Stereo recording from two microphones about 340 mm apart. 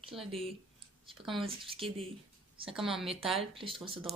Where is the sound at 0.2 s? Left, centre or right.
Centre.